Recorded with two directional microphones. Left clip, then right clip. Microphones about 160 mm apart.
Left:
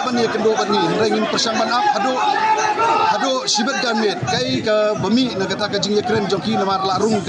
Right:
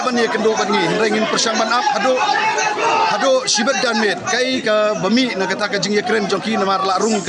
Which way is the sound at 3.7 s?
35° right (ahead or behind).